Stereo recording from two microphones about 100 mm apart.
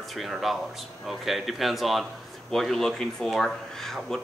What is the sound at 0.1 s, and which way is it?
Speech, centre (ahead or behind).